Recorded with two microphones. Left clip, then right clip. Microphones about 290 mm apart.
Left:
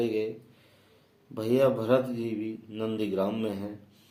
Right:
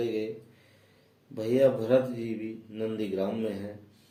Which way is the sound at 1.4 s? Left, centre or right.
Left.